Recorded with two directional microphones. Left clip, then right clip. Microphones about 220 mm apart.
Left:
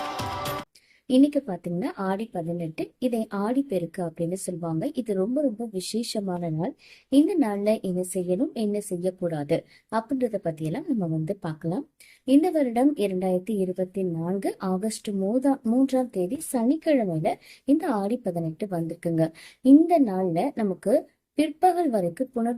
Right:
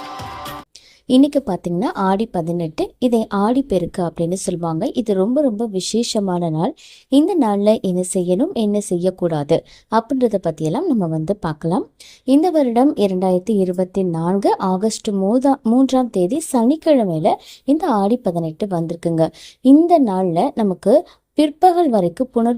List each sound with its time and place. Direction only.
1.0 s a woman's voice: 35° right (ahead or behind)